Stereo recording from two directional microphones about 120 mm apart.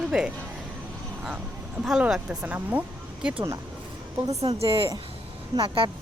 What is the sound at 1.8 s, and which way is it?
Speech, 5° right (ahead or behind).